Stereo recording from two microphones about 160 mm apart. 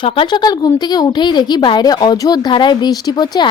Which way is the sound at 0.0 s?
30° left (ahead or behind).